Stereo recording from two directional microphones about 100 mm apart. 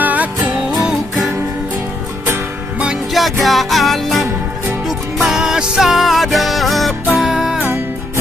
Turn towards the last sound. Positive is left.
turn(degrees=-5)  # may be behind; listen again after turning